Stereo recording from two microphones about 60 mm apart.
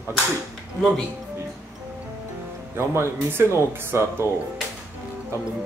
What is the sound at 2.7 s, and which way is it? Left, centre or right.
Speech, right.